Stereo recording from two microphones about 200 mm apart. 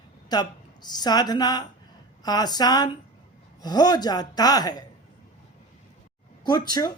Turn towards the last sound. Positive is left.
turn(degrees=20)  # may be behind; listen again after turning